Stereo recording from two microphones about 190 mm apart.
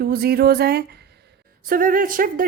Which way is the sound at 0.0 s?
55° right (ahead or behind).